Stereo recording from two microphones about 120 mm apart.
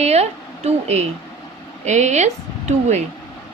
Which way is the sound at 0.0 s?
60° right (ahead or behind).